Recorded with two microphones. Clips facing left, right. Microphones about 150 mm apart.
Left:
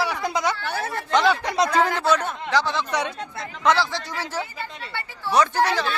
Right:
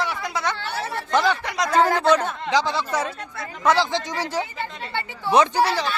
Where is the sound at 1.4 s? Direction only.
25° left (ahead or behind).